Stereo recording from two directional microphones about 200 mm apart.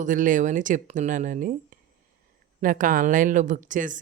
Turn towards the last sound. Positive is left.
turn(degrees=-40)  # may be behind; listen again after turning